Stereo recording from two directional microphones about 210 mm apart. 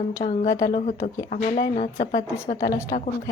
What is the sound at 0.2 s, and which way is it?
Speech, 25° left (ahead or behind).